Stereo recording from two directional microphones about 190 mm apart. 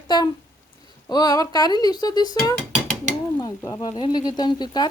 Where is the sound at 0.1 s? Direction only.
25° left (ahead or behind).